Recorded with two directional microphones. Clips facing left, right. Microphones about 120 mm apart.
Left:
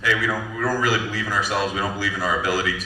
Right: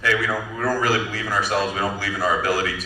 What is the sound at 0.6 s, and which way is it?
A man's voice, 50° right (ahead or behind).